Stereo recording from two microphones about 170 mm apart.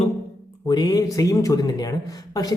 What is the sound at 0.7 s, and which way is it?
Speech, 25° left (ahead or behind).